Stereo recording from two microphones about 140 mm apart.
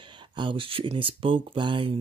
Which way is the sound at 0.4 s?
40° right (ahead or behind).